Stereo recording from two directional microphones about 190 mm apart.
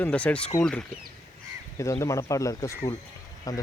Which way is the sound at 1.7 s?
15° left (ahead or behind).